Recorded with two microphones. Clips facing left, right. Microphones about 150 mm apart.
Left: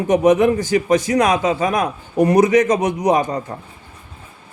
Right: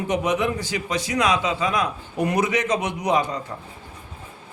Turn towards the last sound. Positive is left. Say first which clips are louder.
# left 5 dB
turn(degrees=45)  # may be behind; listen again after turning